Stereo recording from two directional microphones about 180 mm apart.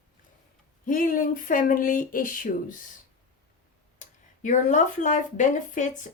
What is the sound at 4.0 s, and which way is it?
Speech, 45° left (ahead or behind).